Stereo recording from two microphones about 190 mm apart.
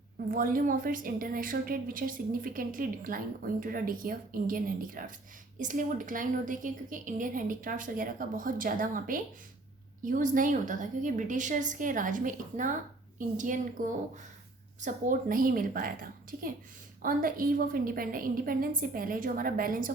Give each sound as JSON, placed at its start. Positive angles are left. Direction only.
{"t": 0.3, "sound": "a woman's voice", "side_deg": -50}
{"t": 14.8, "sound": "a woman's voice", "side_deg": -45}
{"t": 17.0, "sound": "a woman's voice", "side_deg": -45}